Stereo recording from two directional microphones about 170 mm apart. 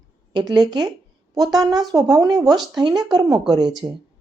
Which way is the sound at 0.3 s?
25° right (ahead or behind).